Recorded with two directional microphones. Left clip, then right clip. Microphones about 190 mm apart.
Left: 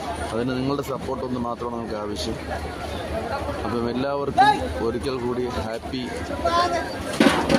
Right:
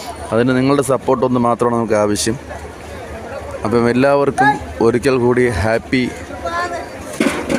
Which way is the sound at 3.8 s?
40° right (ahead or behind).